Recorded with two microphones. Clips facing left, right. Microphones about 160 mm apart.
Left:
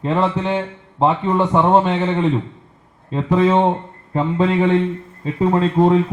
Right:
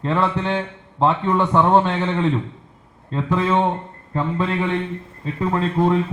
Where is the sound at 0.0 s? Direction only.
15° left (ahead or behind).